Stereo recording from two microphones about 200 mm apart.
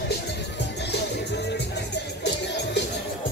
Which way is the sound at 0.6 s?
60° left (ahead or behind).